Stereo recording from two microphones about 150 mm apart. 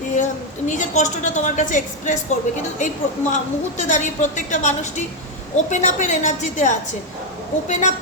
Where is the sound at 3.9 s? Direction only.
55° left (ahead or behind).